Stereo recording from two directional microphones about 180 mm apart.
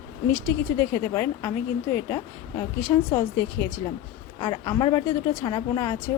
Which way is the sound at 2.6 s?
15° left (ahead or behind).